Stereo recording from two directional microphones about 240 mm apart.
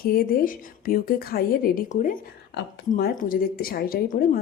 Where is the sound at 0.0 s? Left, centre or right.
Left.